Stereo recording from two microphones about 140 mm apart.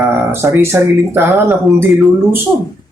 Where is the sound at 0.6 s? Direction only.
15° right (ahead or behind).